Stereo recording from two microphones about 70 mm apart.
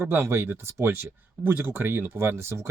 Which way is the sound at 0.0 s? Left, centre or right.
Right.